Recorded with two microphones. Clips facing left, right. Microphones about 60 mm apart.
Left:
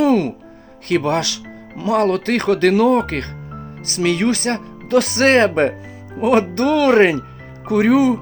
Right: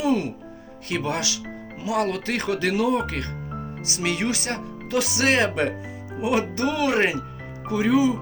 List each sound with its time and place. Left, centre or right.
0.0 s music: left
0.9 s speech: left
6.1 s music: left
6.5 s speech: left